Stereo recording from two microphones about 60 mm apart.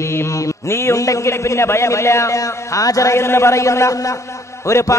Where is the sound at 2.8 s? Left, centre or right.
Left.